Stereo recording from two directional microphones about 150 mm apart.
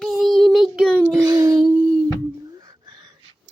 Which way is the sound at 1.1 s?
25° right (ahead or behind).